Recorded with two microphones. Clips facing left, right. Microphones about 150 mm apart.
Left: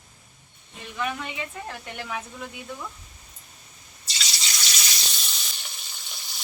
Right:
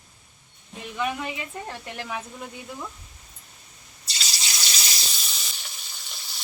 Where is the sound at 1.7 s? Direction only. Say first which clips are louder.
Right 1 dB; centre (ahead or behind).